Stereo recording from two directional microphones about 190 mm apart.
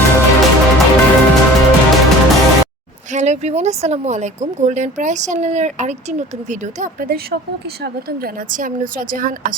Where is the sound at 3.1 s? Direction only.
35° right (ahead or behind).